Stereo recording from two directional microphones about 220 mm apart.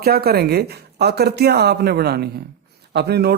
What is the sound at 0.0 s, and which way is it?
Speech, 45° right (ahead or behind).